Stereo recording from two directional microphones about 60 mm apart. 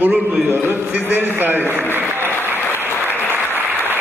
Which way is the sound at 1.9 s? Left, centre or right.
Right.